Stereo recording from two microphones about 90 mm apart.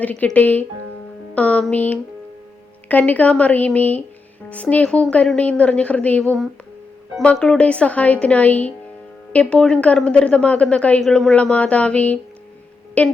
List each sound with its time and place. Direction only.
0.0 s a woman's voice: 15° left (ahead or behind)